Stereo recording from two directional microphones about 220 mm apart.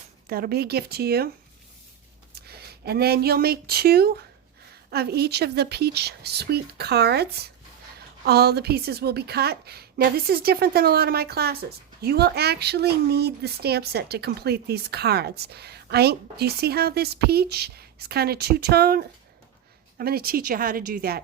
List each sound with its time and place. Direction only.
0.3 s a woman's voice: 45° right (ahead or behind)
2.3 s a woman's voice: 45° right (ahead or behind)